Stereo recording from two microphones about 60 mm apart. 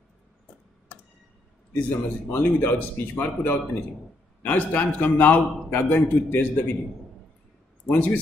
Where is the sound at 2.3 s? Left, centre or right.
Left.